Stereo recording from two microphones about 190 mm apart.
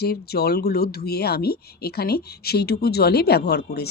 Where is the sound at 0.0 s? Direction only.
55° left (ahead or behind).